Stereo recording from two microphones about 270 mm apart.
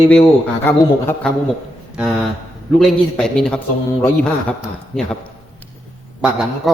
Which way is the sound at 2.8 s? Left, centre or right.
Centre.